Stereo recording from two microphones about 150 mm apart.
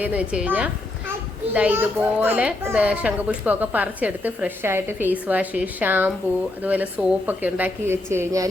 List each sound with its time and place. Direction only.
0.0 s a child's voice: 10° right (ahead or behind)